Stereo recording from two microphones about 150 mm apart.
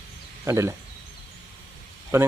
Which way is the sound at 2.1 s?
15° right (ahead or behind).